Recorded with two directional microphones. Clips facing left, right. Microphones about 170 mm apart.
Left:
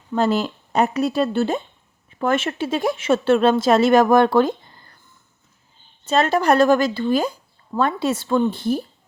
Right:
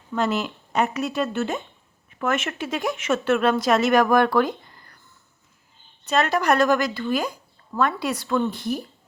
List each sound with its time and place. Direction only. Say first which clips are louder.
0.2 s speech: left 4 dB; 30° left (ahead or behind)
6.1 s speech: left 3 dB; 30° left (ahead or behind)